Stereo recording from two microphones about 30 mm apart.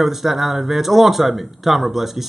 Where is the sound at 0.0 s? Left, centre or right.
Centre.